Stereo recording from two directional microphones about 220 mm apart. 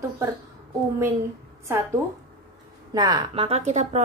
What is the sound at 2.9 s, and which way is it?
A woman's voice, 15° right (ahead or behind).